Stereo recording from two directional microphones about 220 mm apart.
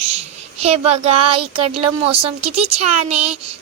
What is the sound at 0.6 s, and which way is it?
A woman's voice, 30° right (ahead or behind).